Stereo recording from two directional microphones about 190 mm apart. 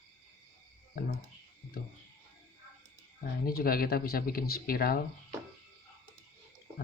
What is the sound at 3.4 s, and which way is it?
Speech, 50° left (ahead or behind).